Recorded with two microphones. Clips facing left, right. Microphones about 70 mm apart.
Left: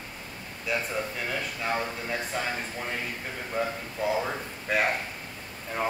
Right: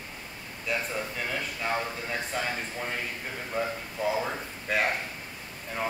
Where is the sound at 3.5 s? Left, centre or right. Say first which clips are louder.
Left 1 dB; centre.